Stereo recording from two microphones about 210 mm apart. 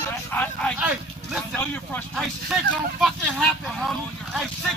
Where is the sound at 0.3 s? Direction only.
10° left (ahead or behind).